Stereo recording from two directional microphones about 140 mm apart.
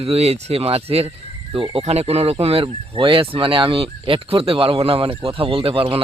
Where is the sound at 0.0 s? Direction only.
45° right (ahead or behind).